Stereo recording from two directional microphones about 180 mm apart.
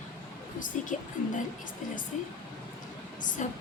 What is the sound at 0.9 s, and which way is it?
Speech, 45° left (ahead or behind).